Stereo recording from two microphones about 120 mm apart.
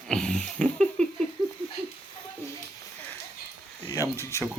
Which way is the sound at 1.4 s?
35° right (ahead or behind).